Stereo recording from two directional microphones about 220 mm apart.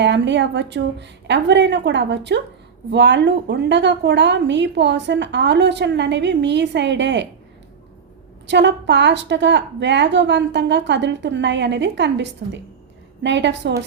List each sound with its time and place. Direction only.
0.0 s a woman's voice: 55° right (ahead or behind)
8.4 s a woman's voice: 55° right (ahead or behind)